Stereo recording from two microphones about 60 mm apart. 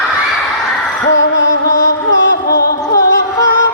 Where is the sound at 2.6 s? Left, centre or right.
Left.